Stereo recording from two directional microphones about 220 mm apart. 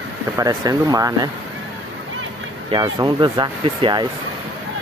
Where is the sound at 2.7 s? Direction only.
20° right (ahead or behind).